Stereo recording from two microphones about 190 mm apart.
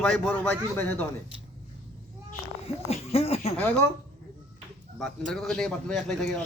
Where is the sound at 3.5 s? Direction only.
10° left (ahead or behind).